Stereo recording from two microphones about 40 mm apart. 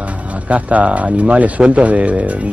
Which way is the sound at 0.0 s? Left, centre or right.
Right.